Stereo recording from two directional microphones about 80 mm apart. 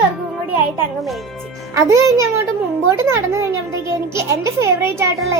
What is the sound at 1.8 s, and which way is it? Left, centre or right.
A child's voice, right.